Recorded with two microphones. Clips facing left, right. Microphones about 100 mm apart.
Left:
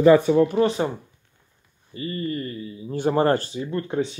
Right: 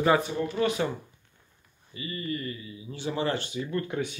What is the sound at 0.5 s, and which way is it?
Speech, 35° left (ahead or behind).